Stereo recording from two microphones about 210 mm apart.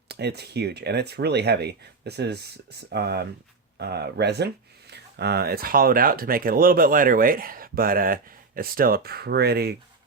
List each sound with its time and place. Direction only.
0.1 s speech: 50° right (ahead or behind)